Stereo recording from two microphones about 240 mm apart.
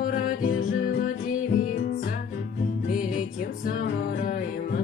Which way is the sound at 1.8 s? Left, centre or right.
Left.